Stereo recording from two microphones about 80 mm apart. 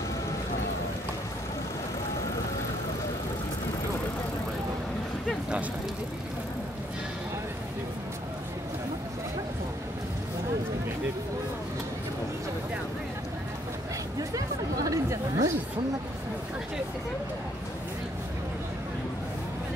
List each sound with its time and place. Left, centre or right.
14.3 s chatter: right